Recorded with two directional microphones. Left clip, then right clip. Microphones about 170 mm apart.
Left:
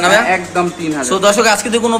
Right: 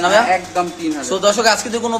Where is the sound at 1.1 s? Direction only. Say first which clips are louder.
Left 3 dB; 10° right (ahead or behind).